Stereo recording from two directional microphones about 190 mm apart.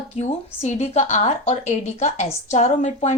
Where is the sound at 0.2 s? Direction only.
35° left (ahead or behind).